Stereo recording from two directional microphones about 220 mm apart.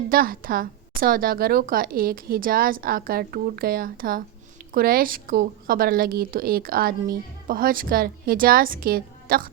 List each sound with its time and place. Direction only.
0.1 s speech: 40° right (ahead or behind)